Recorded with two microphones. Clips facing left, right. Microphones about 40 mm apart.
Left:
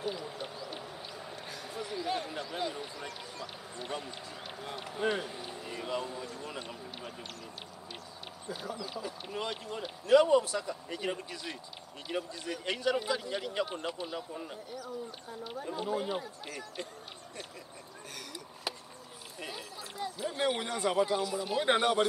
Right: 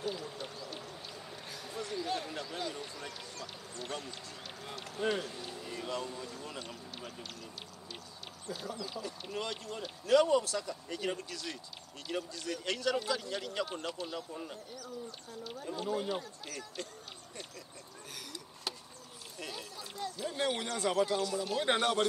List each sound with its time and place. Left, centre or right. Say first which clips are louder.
0.0 s owl: left 2 dB; centre
1.5 s basketball bounce: even; centre
4.6 s speech: left 2 dB; centre
8.5 s speech: left 1 dB; centre
19.4 s speech: left 1 dB; centre